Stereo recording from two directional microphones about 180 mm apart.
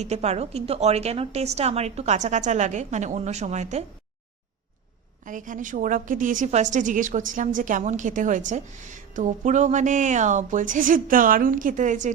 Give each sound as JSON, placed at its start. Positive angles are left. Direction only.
{"t": 0.0, "sound": "a woman's voice", "side_deg": -35}
{"t": 5.2, "sound": "a woman's voice", "side_deg": -45}